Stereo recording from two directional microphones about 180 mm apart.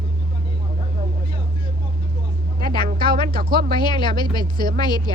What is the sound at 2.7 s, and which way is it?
Speech, 25° left (ahead or behind).